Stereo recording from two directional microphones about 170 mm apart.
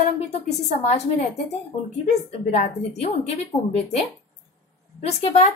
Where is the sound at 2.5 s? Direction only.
40° left (ahead or behind).